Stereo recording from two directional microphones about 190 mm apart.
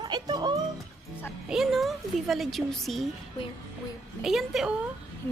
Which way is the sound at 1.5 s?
Centre (ahead or behind).